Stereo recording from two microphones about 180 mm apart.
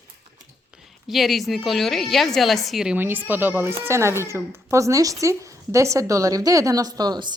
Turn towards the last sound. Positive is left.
turn(degrees=-20)  # may be behind; listen again after turning